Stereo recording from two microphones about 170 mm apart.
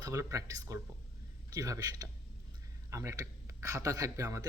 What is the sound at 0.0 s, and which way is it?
Speech, 20° right (ahead or behind).